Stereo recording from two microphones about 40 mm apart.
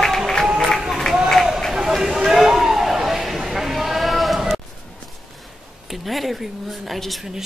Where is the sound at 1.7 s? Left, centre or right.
Centre.